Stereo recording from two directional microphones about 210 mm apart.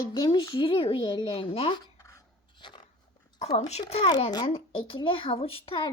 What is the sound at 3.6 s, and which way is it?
A child's voice, 30° left (ahead or behind).